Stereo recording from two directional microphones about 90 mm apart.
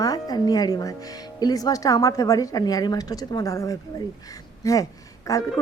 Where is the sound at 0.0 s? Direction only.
45° left (ahead or behind).